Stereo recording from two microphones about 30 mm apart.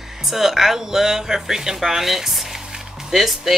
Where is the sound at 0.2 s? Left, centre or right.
Centre.